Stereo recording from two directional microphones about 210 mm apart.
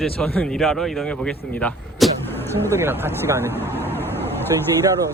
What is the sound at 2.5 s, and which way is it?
Speech, 10° right (ahead or behind).